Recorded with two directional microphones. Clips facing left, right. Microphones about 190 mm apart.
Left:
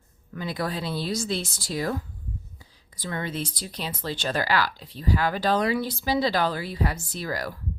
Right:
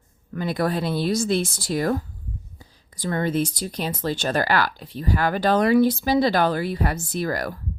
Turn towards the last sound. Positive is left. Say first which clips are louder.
# right 5 dB
turn(degrees=-50)  # may be behind; listen again after turning